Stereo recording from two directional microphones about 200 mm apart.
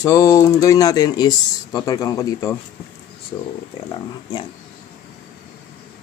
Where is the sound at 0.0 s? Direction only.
15° left (ahead or behind).